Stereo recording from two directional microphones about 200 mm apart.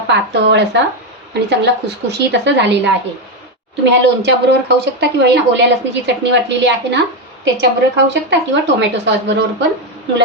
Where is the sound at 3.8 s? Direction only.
60° right (ahead or behind).